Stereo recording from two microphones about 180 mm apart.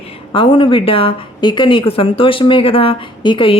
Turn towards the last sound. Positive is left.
turn(degrees=25)  # may be behind; listen again after turning